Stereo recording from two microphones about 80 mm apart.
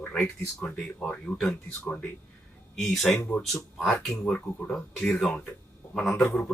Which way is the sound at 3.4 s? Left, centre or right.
Centre.